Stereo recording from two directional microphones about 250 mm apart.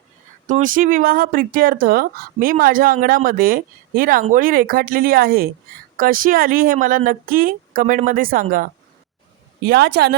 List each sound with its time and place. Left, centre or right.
0.4 s speech: right